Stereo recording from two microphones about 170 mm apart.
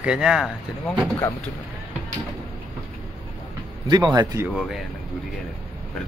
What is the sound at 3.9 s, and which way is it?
Speech, 25° right (ahead or behind).